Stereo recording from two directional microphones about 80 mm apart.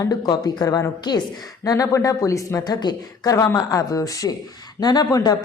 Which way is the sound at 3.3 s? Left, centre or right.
Left.